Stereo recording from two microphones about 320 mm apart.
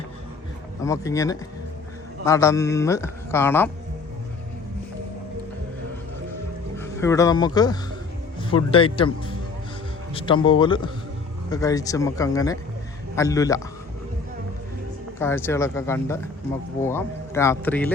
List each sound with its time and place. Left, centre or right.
0.8 s a man's voice: centre
6.7 s a man's voice: centre
15.2 s a man's voice: centre